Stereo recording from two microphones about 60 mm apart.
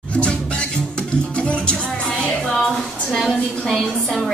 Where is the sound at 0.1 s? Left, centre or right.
Centre.